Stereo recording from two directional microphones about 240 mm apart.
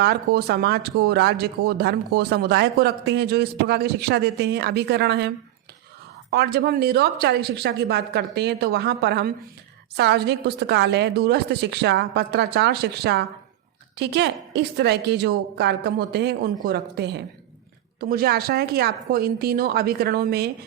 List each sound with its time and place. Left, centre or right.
0.0 s speech: right
6.3 s a woman's voice: right